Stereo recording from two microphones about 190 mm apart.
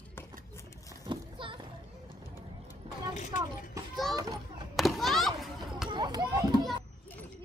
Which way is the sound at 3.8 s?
15° right (ahead or behind).